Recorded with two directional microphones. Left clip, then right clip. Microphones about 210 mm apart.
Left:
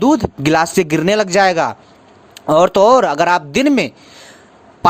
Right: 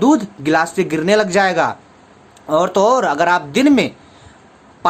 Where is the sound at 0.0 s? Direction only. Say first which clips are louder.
Left 1 dB; 40° left (ahead or behind).